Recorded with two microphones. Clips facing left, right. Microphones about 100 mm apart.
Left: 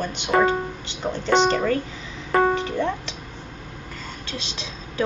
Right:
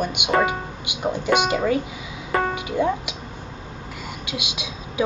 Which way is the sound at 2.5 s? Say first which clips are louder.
Right 1 dB; 10° right (ahead or behind).